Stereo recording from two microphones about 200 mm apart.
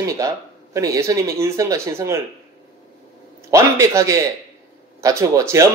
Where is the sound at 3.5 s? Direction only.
15° right (ahead or behind).